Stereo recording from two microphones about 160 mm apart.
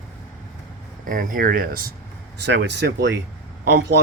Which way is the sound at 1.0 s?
60° right (ahead or behind).